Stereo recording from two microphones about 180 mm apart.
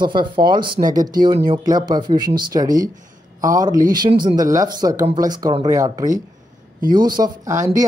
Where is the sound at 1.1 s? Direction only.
25° right (ahead or behind).